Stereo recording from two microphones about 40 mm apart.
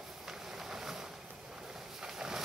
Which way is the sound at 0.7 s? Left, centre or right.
Centre.